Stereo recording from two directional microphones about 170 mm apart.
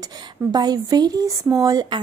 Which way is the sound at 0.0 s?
25° right (ahead or behind).